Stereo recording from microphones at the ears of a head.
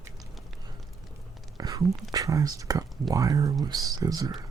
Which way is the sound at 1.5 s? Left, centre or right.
Right.